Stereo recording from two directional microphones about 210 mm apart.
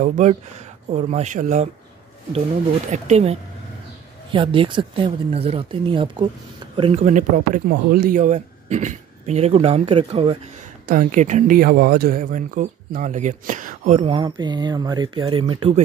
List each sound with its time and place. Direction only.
0.0 s speech: 35° right (ahead or behind)
2.9 s speech: 30° right (ahead or behind)
10.9 s speech: 40° right (ahead or behind)